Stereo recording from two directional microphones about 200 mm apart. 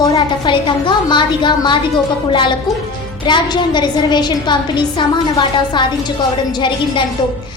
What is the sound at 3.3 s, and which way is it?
A woman's voice, 20° left (ahead or behind).